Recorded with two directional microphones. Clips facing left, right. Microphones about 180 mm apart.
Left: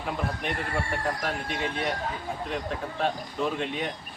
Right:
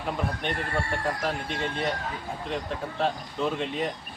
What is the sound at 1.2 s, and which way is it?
Speech, centre (ahead or behind).